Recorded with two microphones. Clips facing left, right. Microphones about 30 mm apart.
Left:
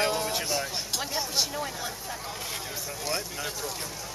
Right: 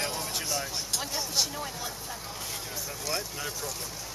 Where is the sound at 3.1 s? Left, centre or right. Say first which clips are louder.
Left 1 dB; centre.